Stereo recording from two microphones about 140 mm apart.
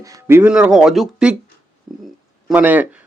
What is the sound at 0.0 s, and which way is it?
Speech, 20° right (ahead or behind).